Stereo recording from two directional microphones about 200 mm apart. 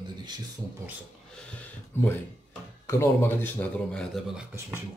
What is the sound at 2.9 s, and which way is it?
Speech, 10° left (ahead or behind).